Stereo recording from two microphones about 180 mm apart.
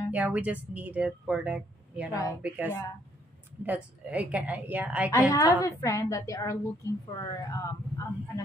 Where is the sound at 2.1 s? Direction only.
20° left (ahead or behind).